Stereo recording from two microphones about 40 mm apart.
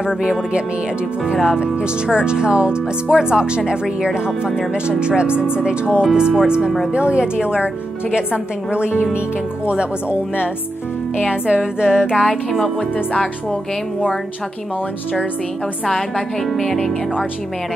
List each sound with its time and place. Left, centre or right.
0.0 s speech: right
11.1 s speech: right
12.4 s speech: centre
16.2 s speech: centre